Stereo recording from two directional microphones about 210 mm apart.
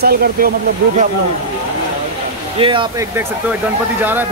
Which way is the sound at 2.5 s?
25° right (ahead or behind).